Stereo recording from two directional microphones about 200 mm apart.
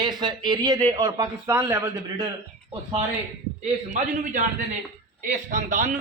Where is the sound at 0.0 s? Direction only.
20° right (ahead or behind).